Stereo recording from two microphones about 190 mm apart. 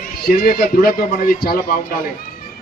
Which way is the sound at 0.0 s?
50° left (ahead or behind).